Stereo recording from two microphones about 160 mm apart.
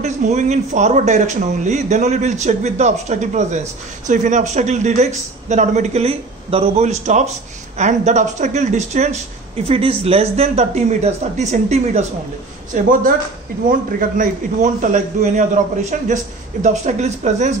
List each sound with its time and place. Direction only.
0.0 s speech: 45° right (ahead or behind)
12.7 s speech: 60° right (ahead or behind)